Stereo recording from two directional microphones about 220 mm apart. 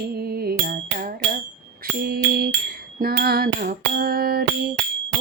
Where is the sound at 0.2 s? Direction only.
45° right (ahead or behind).